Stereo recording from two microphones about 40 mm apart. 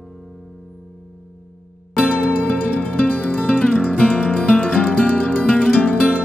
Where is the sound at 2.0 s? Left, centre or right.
Left.